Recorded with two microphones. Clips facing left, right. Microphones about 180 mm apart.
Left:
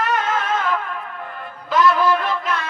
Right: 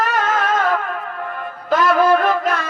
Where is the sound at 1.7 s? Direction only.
50° right (ahead or behind).